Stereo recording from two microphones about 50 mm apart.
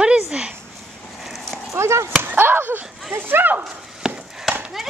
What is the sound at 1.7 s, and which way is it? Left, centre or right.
Speech, right.